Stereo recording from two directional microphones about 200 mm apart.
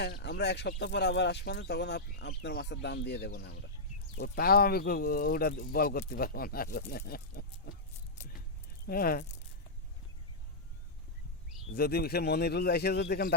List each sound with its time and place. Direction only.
0.0 s speech: 55° left (ahead or behind)
8.9 s speech: 50° left (ahead or behind)
11.7 s speech: 50° left (ahead or behind)